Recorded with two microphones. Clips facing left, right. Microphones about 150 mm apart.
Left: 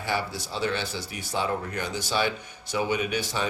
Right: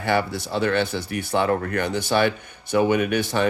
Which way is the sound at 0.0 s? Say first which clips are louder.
Right 7 dB; 60° right (ahead or behind).